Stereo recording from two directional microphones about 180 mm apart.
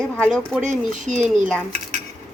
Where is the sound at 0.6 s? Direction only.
40° right (ahead or behind).